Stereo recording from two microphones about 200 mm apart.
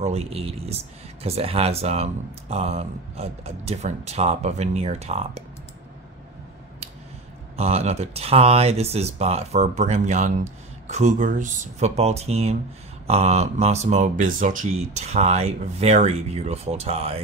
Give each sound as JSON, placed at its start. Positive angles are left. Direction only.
{"t": 0.0, "sound": "speech", "side_deg": -30}
{"t": 7.5, "sound": "speech", "side_deg": -30}